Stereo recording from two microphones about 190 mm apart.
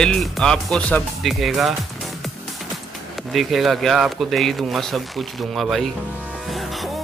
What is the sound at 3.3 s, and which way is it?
Speech, centre (ahead or behind).